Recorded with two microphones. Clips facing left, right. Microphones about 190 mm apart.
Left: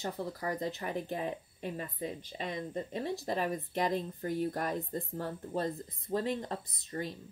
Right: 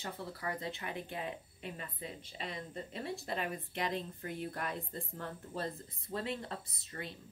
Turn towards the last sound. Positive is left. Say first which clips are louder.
# left 7 dB
turn(degrees=35)  # may be behind; listen again after turning